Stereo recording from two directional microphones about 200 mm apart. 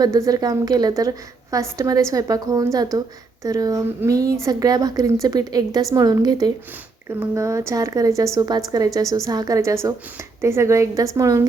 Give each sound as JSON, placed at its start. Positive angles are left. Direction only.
{"t": 0.0, "sound": "a woman's voice", "side_deg": -15}